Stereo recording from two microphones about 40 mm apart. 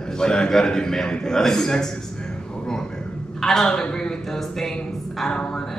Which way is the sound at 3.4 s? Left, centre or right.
Centre.